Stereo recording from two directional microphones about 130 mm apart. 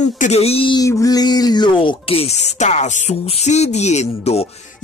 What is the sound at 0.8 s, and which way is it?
Music, 25° left (ahead or behind).